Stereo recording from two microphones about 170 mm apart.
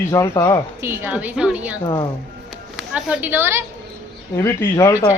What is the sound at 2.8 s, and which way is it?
Speech, 5° right (ahead or behind).